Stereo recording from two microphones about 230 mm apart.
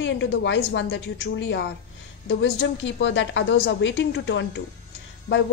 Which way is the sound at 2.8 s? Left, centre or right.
Left.